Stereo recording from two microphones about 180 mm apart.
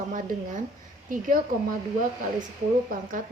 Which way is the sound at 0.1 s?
45° right (ahead or behind).